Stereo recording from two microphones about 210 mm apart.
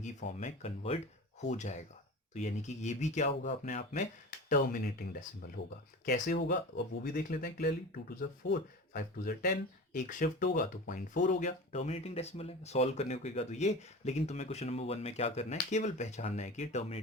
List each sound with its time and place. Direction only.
0.0 s speech: 35° left (ahead or behind)
5.6 s speech: 55° left (ahead or behind)
6.1 s speech: 45° left (ahead or behind)